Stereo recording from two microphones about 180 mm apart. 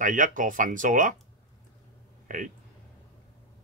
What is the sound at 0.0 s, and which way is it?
Speech, 45° right (ahead or behind).